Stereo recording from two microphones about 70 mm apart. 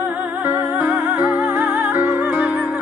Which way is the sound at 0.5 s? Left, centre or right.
Right.